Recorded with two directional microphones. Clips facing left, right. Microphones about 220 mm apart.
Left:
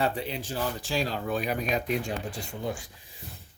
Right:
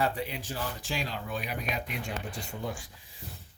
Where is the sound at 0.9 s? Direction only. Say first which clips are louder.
Left 7 dB; 40° left (ahead or behind).